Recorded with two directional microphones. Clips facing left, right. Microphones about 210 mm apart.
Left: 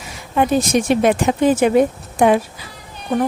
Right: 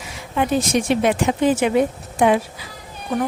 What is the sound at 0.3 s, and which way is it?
Speech, 45° left (ahead or behind).